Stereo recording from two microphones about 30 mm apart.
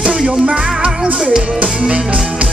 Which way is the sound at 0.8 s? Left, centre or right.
Right.